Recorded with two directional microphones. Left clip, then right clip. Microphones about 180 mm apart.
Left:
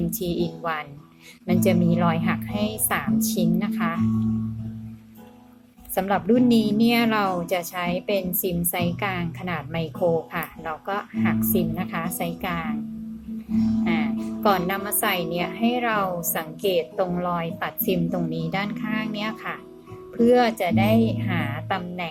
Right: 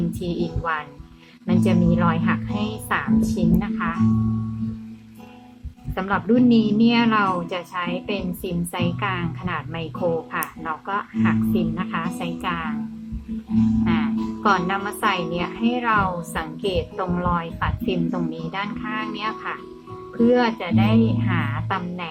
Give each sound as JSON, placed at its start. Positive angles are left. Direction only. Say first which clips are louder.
{"t": 0.2, "sound": "a woman's voice", "louder": "even", "side_deg": 10}
{"t": 5.9, "sound": "a woman's voice", "louder": "even", "side_deg": 5}
{"t": 13.8, "sound": "speech", "louder": "right 2 dB", "side_deg": 5}